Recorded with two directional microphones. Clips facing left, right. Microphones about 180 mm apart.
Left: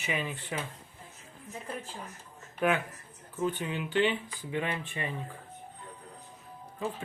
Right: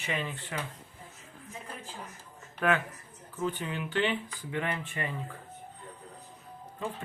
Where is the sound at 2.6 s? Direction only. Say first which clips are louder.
Even; 15° left (ahead or behind).